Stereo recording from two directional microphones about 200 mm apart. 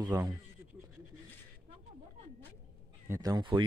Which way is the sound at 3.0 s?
15° right (ahead or behind).